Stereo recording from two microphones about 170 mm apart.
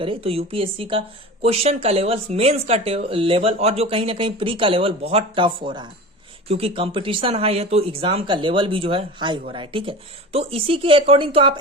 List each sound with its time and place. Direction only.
0.0 s speech: 35° right (ahead or behind)